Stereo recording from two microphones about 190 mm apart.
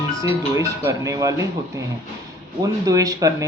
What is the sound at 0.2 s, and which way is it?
Speech, 15° right (ahead or behind).